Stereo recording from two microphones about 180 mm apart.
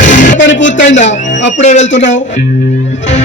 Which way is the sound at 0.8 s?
40° left (ahead or behind).